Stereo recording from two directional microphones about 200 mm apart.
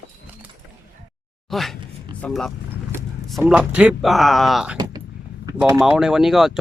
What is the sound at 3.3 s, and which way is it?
Speech, centre (ahead or behind).